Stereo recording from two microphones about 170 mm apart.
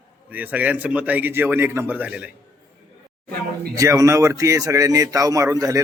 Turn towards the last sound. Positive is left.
turn(degrees=-20)  # may be behind; listen again after turning